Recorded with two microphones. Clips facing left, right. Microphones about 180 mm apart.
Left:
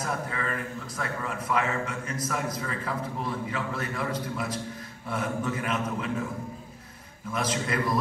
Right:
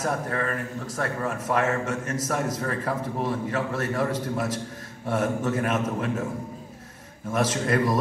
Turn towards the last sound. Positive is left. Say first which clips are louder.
# right 4 dB
turn(degrees=-45)  # may be behind; listen again after turning